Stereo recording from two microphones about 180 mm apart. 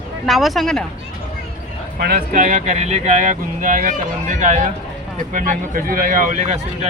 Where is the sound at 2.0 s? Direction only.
55° right (ahead or behind).